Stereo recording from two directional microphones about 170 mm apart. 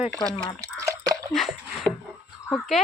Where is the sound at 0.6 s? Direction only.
20° right (ahead or behind).